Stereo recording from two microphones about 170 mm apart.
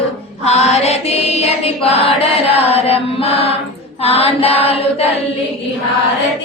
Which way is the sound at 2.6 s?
35° left (ahead or behind).